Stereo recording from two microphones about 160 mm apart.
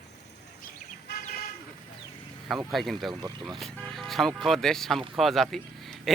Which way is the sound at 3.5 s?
Centre (ahead or behind).